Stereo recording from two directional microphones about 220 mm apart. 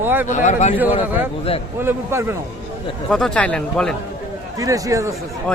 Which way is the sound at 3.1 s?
Centre (ahead or behind).